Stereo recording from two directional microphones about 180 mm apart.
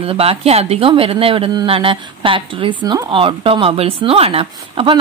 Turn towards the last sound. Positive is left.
turn(degrees=-30)  # may be behind; listen again after turning